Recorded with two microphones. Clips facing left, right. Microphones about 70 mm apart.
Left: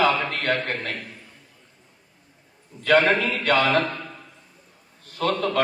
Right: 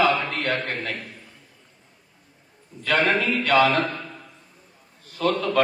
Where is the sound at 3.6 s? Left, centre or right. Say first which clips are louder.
Right 2 dB; right.